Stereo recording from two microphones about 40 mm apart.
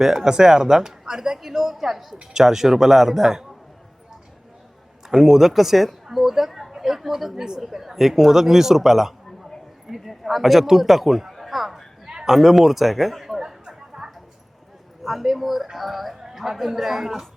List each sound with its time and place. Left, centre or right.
0.0 s speech: centre
5.0 s a man's voice: centre
13.4 s chatter: centre
15.0 s speech: centre